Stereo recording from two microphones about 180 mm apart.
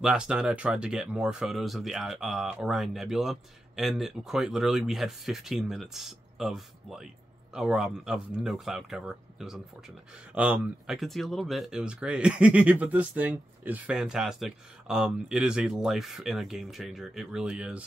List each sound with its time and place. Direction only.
0.0 s speech: 5° right (ahead or behind)